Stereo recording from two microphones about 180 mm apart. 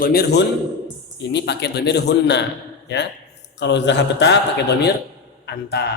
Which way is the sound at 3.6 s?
75° left (ahead or behind).